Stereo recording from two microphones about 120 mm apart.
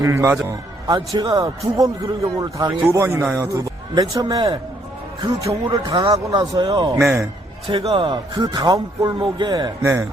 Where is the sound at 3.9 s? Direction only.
30° right (ahead or behind).